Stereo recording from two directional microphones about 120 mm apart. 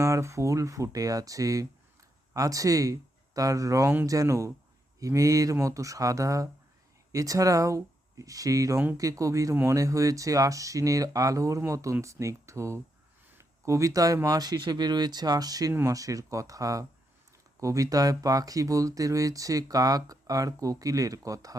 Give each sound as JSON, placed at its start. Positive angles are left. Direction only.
{"t": 0.0, "sound": "speech", "side_deg": -25}